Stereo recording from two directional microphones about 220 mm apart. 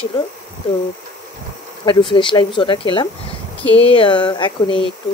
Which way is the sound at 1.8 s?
20° left (ahead or behind).